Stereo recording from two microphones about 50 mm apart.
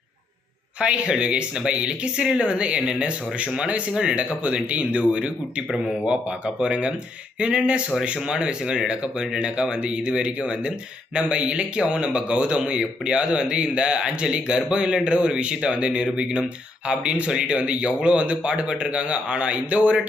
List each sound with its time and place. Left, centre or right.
0.8 s speech: centre